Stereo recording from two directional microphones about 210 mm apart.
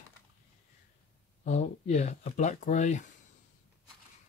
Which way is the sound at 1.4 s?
35° left (ahead or behind).